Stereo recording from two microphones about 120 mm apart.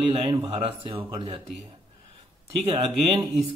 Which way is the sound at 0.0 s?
50° right (ahead or behind).